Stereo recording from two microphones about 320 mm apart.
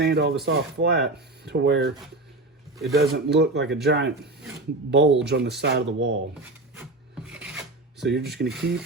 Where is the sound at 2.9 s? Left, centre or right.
Right.